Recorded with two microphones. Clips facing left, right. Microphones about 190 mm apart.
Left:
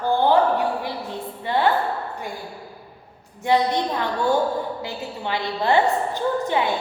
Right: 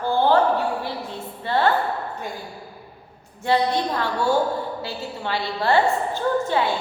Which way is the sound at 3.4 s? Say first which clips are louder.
Left 1 dB; 15° left (ahead or behind).